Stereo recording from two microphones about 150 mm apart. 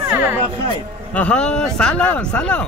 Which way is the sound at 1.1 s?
10° left (ahead or behind).